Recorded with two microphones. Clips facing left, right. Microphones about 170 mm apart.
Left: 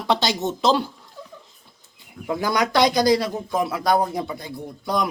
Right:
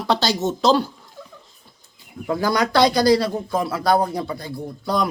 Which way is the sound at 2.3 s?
20° left (ahead or behind).